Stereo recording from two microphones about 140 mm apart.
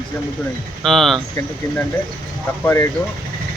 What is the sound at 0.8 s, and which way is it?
Speech, centre (ahead or behind).